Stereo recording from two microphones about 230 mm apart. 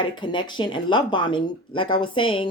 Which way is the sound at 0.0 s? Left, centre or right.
Left.